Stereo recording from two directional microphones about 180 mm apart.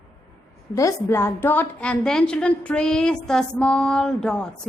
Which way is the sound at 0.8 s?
15° left (ahead or behind).